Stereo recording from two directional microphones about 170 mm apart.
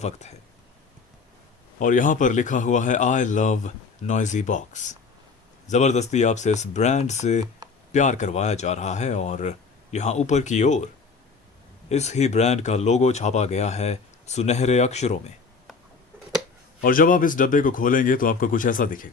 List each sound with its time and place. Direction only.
0.0 s speech: 40° left (ahead or behind)
1.8 s speech: 50° left (ahead or behind)
11.9 s speech: 40° left (ahead or behind)
16.8 s speech: 55° left (ahead or behind)